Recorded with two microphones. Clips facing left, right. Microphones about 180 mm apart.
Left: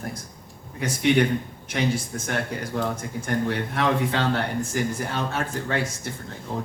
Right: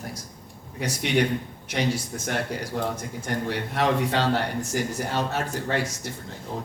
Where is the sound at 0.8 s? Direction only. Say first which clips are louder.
Left 3 dB; 55° left (ahead or behind).